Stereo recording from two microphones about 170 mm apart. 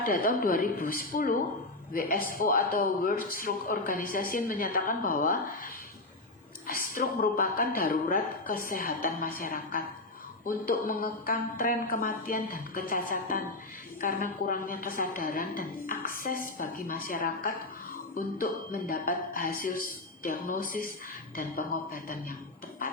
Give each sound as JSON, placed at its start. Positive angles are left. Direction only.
{"t": 0.0, "sound": "a man's voice", "side_deg": 55}